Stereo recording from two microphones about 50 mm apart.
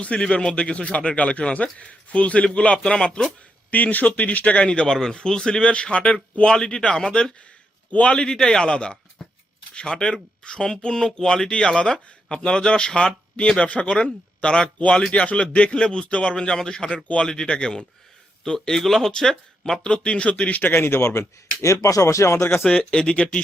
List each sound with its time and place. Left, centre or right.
0.0 s speech: left
3.7 s speech: left
9.2 s a sound: centre
9.7 s speech: centre
20.7 s speech: left
21.8 s speech: left
22.6 s speech: centre